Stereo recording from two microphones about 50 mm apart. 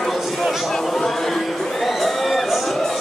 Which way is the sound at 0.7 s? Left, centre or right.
Centre.